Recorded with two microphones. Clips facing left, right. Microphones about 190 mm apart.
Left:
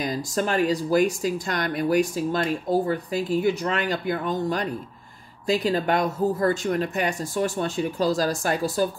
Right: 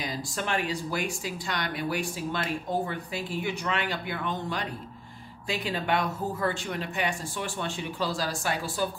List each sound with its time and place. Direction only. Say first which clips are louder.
0.0 s speech: left 7 dB; 45° left (ahead or behind)